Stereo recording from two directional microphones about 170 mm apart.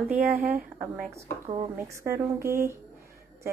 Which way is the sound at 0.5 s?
5° right (ahead or behind).